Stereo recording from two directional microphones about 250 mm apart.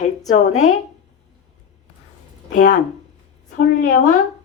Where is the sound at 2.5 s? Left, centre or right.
Left.